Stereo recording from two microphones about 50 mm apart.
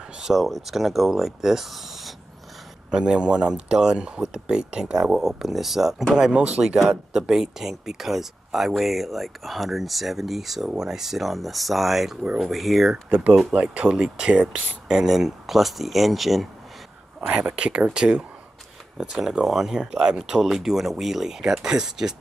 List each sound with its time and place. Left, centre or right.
0.2 s speech: centre
2.9 s speech: centre
12.9 s speech: right; by 16.4 s centre
17.5 s speech: centre